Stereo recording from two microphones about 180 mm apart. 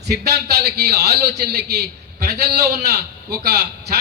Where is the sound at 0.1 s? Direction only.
60° right (ahead or behind).